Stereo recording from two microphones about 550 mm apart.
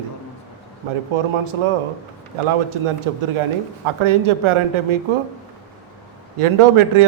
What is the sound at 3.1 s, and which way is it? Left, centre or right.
A man's voice, right.